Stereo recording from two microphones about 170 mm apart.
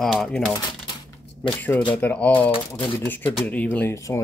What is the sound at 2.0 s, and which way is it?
Speech, 10° left (ahead or behind).